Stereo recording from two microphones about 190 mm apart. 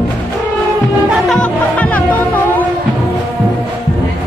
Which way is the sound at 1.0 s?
5° left (ahead or behind).